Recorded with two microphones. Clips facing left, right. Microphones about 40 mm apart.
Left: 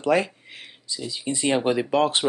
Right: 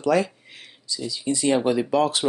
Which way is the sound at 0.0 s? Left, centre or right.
Left.